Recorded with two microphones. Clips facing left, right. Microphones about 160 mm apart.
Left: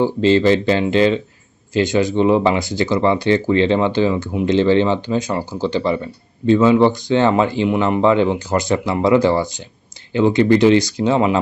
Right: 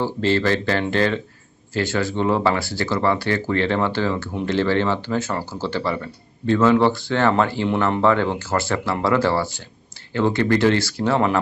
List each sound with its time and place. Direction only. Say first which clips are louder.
0.0 s speech: left 6 dB; 20° left (ahead or behind)